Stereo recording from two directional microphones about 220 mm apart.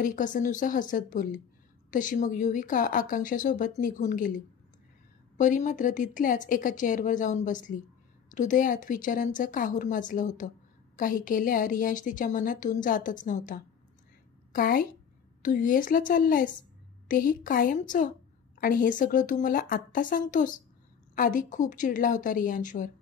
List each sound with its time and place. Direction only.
0.0 s a woman's voice: 35° left (ahead or behind)
5.4 s a woman's voice: 35° left (ahead or behind)